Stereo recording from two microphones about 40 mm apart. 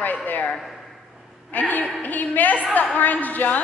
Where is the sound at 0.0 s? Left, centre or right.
Left.